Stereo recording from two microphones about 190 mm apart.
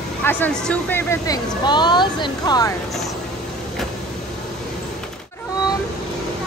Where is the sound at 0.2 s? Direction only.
10° left (ahead or behind).